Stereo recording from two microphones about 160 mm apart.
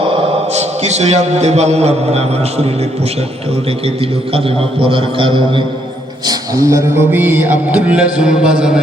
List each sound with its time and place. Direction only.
0.5 s a man's voice: 45° right (ahead or behind)
4.4 s a man's voice: 35° right (ahead or behind)
6.2 s mantra: 20° right (ahead or behind); by 8.8 s 5° right (ahead or behind)